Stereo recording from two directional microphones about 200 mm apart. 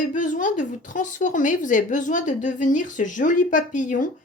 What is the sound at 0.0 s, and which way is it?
Speech, 40° left (ahead or behind).